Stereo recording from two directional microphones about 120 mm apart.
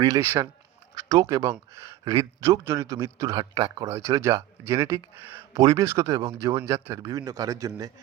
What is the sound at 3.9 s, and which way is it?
Speech, 25° right (ahead or behind).